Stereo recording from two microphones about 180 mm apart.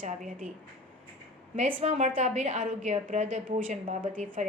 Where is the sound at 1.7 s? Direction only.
40° right (ahead or behind).